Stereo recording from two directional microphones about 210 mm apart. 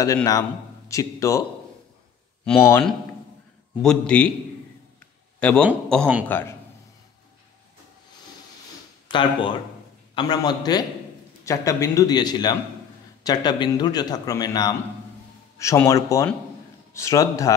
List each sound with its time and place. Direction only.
0.0 s speech: 15° left (ahead or behind)
2.4 s a man's voice: 10° left (ahead or behind)
5.4 s a man's voice: 5° left (ahead or behind)
9.1 s speech: 25° left (ahead or behind)